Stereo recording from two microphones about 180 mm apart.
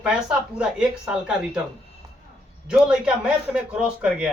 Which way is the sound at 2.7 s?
5° right (ahead or behind).